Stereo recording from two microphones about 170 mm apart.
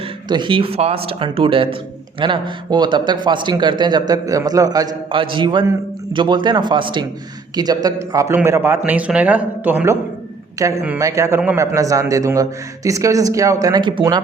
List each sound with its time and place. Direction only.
0.3 s a man's voice: 25° right (ahead or behind)